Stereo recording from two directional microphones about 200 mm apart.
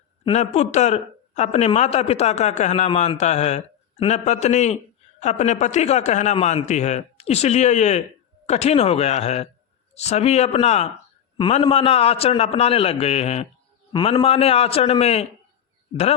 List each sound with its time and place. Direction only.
0.3 s a man's voice: 35° left (ahead or behind)